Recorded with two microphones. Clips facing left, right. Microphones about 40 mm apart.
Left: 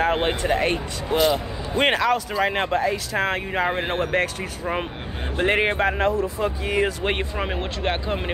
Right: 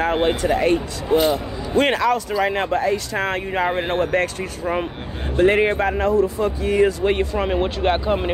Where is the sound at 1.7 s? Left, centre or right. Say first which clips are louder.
Right 2 dB; centre.